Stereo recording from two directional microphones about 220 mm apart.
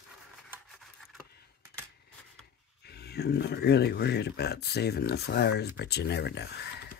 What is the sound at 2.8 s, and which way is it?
Speech, 45° left (ahead or behind).